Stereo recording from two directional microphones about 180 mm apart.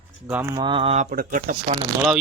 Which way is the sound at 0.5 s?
25° right (ahead or behind).